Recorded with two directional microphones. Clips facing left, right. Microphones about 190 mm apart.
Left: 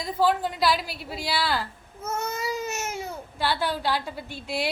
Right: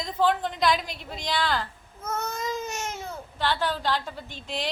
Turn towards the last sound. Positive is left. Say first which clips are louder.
# left 3 dB
turn(degrees=10)  # may be behind; listen again after turning